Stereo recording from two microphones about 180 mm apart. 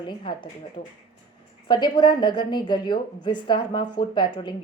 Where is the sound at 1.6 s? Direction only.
25° left (ahead or behind).